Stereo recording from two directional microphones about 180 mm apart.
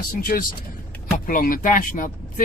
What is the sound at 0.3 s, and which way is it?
Speech, 50° left (ahead or behind).